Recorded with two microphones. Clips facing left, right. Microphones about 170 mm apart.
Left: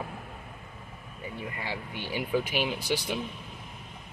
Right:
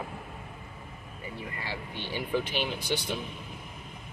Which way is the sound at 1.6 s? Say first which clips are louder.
Left 1 dB; 10° left (ahead or behind).